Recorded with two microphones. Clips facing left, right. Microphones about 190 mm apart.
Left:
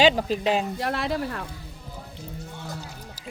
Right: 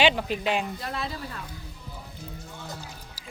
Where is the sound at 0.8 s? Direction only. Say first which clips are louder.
Left 7 dB; 75° left (ahead or behind).